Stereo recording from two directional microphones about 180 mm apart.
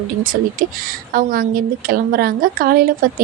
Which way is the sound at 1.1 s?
50° right (ahead or behind).